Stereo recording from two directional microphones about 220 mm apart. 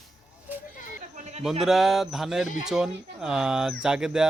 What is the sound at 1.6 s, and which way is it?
Speech, centre (ahead or behind).